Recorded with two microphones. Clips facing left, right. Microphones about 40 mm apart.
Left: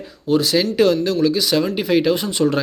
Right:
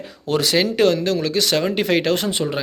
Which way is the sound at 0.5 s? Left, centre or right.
Right.